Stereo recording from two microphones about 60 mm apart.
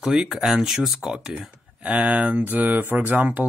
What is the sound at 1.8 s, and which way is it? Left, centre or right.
Speech, right.